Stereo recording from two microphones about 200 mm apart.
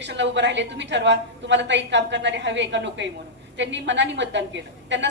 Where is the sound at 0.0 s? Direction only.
60° right (ahead or behind).